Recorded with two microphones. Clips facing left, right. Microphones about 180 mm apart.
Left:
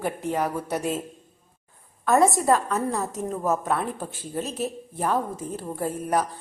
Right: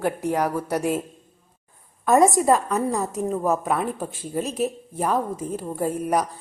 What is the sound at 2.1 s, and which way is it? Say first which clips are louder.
Speech: right 2 dB; 15° right (ahead or behind).